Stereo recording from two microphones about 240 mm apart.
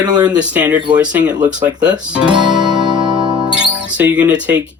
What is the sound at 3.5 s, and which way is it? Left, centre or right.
Speech, centre.